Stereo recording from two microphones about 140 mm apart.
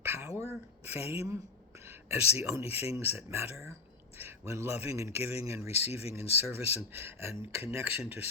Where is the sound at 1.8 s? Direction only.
15° right (ahead or behind).